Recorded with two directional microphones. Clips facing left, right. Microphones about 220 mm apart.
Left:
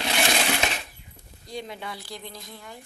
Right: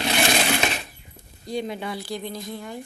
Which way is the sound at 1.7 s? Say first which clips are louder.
Right 6 dB; 15° right (ahead or behind).